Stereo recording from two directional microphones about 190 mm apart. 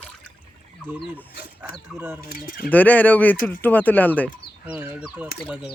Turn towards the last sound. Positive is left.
turn(degrees=-5)  # may be behind; listen again after turning